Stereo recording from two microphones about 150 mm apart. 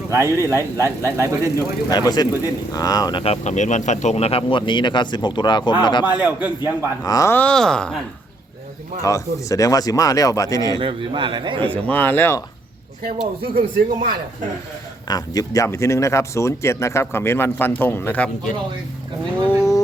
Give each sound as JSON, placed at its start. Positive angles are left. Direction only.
{"t": 0.1, "sound": "speech", "side_deg": -20}
{"t": 1.5, "sound": "speech", "side_deg": 25}
{"t": 3.4, "sound": "speech", "side_deg": 50}
{"t": 6.1, "sound": "a man's voice", "side_deg": -10}
{"t": 6.6, "sound": "speech", "side_deg": 25}
{"t": 9.0, "sound": "speech", "side_deg": 20}
{"t": 10.8, "sound": "a man's voice", "side_deg": -35}
{"t": 11.7, "sound": "speech", "side_deg": 10}
{"t": 13.4, "sound": "speech", "side_deg": -85}
{"t": 15.0, "sound": "speech", "side_deg": 25}
{"t": 19.5, "sound": "a sound", "side_deg": 20}